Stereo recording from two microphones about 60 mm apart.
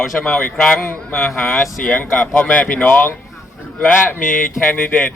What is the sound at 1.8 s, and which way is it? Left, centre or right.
Speech, left.